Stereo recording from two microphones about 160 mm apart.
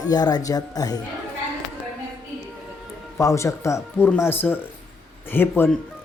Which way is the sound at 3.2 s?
20° left (ahead or behind).